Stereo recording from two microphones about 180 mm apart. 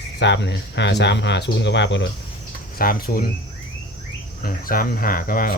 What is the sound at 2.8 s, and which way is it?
Speech, 55° left (ahead or behind).